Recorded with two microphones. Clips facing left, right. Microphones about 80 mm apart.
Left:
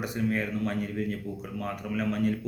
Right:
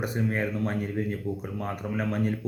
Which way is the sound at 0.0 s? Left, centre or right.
Right.